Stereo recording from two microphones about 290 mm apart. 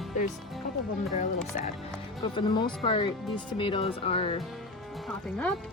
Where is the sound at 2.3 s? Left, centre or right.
Centre.